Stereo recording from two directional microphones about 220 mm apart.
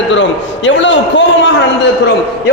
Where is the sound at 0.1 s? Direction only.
55° left (ahead or behind).